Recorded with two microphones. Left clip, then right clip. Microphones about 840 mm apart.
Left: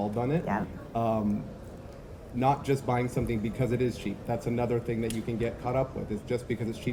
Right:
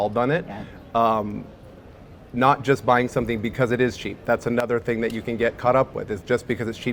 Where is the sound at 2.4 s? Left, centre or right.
Right.